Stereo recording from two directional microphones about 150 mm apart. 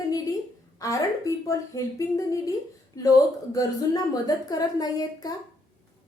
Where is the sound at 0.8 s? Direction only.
20° left (ahead or behind).